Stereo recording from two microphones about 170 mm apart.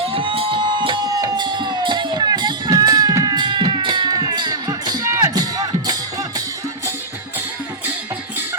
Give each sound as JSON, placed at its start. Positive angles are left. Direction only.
{"t": 0.1, "sound": "music", "side_deg": -30}